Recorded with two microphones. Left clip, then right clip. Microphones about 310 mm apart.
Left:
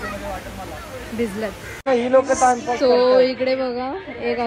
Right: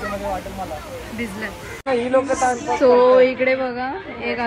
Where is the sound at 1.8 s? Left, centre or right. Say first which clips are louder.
Left 2 dB; left.